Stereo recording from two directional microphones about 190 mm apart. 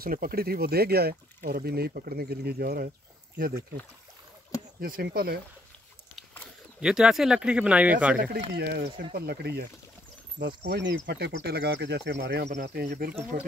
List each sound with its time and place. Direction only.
0.0 s speech: 50° right (ahead or behind)
4.7 s speech: 50° right (ahead or behind)
6.8 s speech: 5° right (ahead or behind)
8.2 s speech: 55° right (ahead or behind)